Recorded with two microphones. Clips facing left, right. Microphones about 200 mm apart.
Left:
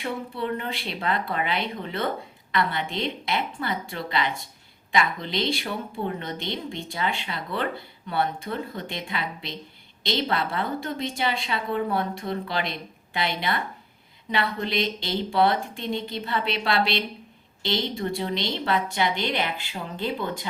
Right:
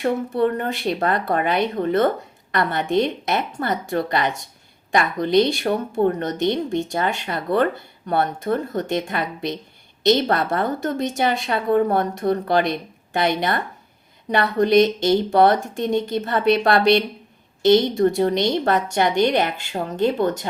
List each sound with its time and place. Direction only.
0.0 s speech: 50° right (ahead or behind)
18.1 s speech: 45° right (ahead or behind)